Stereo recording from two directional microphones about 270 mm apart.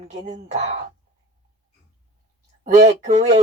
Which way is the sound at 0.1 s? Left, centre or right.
Right.